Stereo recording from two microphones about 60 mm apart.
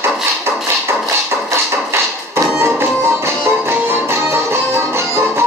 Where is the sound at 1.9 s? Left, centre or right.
Right.